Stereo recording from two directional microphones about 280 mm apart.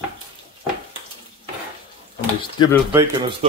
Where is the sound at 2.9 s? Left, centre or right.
Centre.